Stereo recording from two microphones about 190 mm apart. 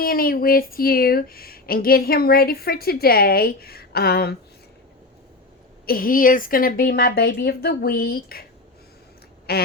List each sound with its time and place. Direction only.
0.0 s speech: 50° left (ahead or behind)
5.8 s speech: 50° left (ahead or behind)
9.5 s quack: 55° left (ahead or behind)